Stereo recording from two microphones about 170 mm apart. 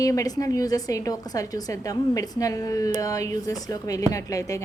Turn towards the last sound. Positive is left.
turn(degrees=20)  # may be behind; listen again after turning